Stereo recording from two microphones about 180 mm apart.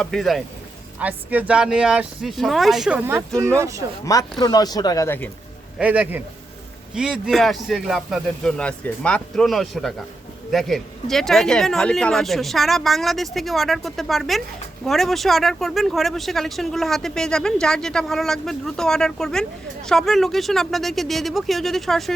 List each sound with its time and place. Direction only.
0.0 s speech: centre (ahead or behind); by 3.8 s 15° right (ahead or behind)
4.0 s speech: 20° left (ahead or behind)
5.8 s speech: 10° right (ahead or behind)